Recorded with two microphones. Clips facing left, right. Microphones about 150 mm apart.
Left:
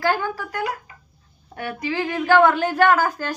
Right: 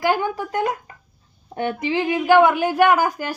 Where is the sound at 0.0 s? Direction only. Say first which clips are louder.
Right 2 dB; 15° right (ahead or behind).